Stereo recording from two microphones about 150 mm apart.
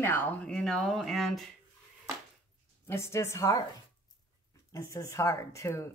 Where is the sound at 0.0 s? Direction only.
15° left (ahead or behind).